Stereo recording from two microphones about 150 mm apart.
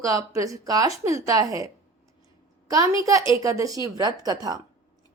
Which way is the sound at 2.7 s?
20° right (ahead or behind).